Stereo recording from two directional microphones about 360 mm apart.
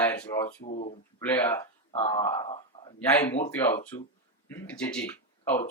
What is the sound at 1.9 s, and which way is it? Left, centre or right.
Speech, centre.